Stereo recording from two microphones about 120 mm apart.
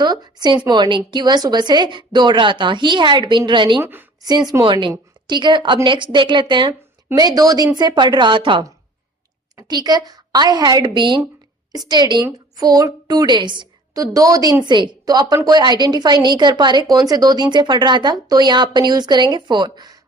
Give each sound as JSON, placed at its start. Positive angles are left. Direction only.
{"t": 0.0, "sound": "a woman's voice", "side_deg": -35}
{"t": 3.8, "sound": "a woman's voice", "side_deg": -20}
{"t": 4.2, "sound": "a woman's voice", "side_deg": -35}
{"t": 9.6, "sound": "a woman's voice", "side_deg": -35}
{"t": 14.0, "sound": "a woman's voice", "side_deg": -30}